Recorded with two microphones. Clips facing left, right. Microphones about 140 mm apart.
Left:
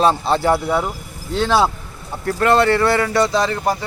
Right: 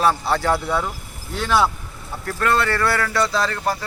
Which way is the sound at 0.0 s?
20° left (ahead or behind).